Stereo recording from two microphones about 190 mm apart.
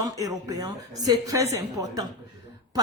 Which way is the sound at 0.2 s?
20° right (ahead or behind).